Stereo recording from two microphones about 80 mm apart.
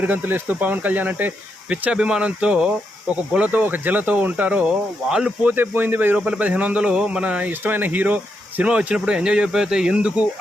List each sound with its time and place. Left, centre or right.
0.0 s a man's voice: right
5.5 s a man's voice: right